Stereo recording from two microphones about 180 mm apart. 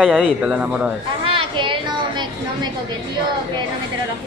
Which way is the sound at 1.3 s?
25° right (ahead or behind).